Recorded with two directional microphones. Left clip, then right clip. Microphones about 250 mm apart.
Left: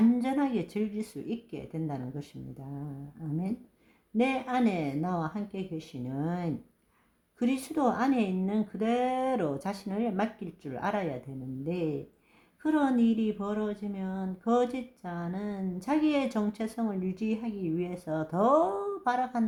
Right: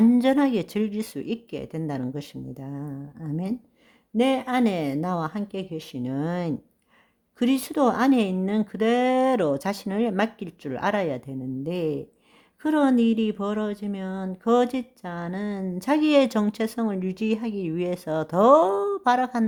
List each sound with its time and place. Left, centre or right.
0.2 s speech: right
4.2 s speech: right